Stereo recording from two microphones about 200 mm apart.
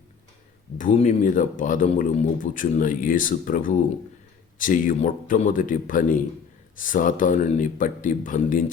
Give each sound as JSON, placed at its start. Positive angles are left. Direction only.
{"t": 0.8, "sound": "speech", "side_deg": 40}